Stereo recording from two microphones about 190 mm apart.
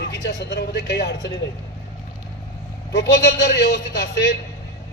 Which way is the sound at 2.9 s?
60° left (ahead or behind).